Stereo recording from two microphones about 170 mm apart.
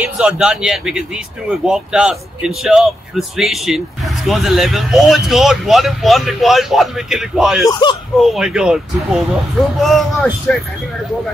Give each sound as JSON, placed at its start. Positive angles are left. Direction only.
{"t": 0.0, "sound": "speech", "side_deg": -5}
{"t": 7.6, "sound": "speech", "side_deg": 25}
{"t": 8.2, "sound": "speech", "side_deg": 0}